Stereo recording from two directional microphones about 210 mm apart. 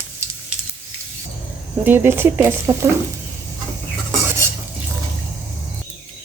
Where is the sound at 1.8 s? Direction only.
10° right (ahead or behind).